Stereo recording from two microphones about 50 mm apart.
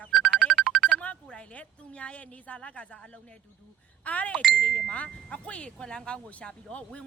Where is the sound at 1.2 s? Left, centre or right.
Left.